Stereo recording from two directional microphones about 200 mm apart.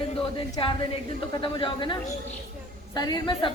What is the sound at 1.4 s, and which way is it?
Speech, 25° left (ahead or behind).